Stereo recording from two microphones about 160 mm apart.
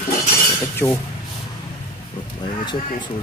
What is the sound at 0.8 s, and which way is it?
Speech, 20° left (ahead or behind).